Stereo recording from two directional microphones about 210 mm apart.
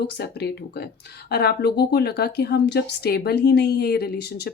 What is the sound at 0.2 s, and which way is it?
A woman's voice, 50° left (ahead or behind).